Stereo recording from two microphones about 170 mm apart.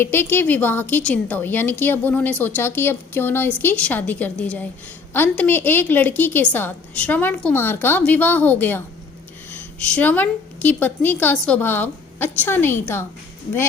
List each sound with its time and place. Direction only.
0.0 s a woman's voice: 10° left (ahead or behind)